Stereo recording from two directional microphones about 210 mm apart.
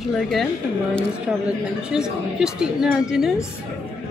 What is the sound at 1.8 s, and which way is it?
A woman's voice, 5° right (ahead or behind).